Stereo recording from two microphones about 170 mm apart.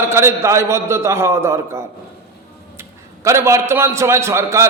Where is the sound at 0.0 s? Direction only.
15° right (ahead or behind).